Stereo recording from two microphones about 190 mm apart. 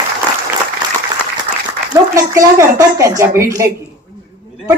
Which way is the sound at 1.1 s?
20° right (ahead or behind).